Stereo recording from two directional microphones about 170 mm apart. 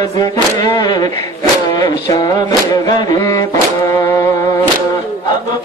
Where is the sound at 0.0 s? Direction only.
20° left (ahead or behind).